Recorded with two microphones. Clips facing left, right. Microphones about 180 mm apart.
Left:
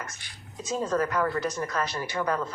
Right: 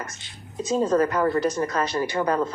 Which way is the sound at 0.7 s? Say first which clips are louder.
Right 6 dB; 25° right (ahead or behind).